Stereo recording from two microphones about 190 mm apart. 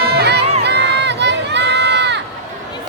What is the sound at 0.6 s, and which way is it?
Crowd, 65° right (ahead or behind).